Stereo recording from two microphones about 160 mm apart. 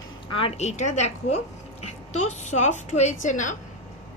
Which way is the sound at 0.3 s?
40° left (ahead or behind).